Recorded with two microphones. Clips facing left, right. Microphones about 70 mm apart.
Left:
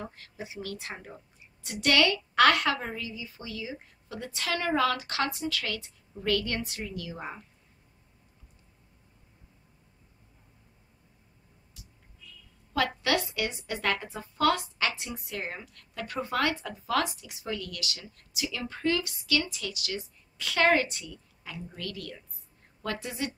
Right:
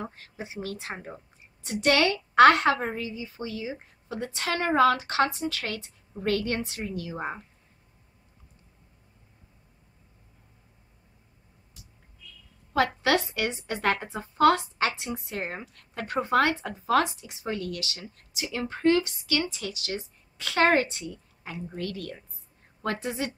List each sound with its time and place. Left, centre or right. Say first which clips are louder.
0.0 s a woman's voice: right 3 dB; right
12.7 s a woman's voice: right 4 dB; right
16.0 s a woman's voice: right 6 dB; right